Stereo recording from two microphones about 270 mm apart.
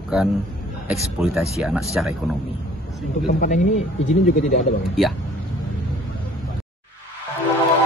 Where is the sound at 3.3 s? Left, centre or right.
Left.